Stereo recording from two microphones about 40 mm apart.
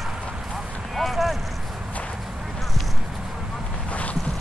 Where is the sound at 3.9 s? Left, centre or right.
Left.